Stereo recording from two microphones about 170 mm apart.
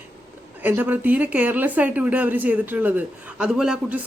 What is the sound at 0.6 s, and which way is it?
Speech, 10° right (ahead or behind).